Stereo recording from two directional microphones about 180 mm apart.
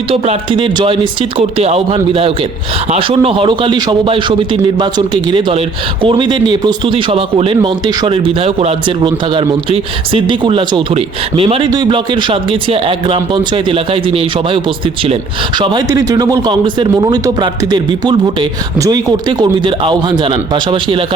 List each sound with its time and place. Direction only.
0.1 s a man's voice: 30° right (ahead or behind)